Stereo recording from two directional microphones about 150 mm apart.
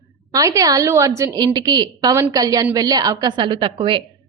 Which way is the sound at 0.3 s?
25° right (ahead or behind).